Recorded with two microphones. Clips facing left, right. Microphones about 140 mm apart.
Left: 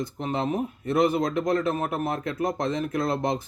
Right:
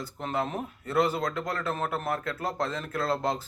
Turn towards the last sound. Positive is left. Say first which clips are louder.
# left 3 dB
turn(degrees=15)  # may be behind; listen again after turning